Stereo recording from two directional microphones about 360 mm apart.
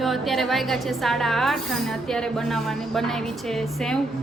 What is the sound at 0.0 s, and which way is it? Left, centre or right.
A woman's voice, centre.